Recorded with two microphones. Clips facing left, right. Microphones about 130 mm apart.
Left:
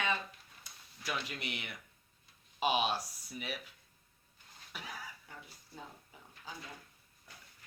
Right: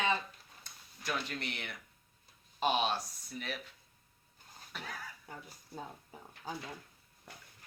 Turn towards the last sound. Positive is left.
turn(degrees=-60)  # may be behind; listen again after turning